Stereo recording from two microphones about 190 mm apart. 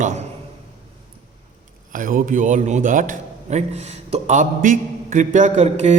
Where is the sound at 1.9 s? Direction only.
45° right (ahead or behind).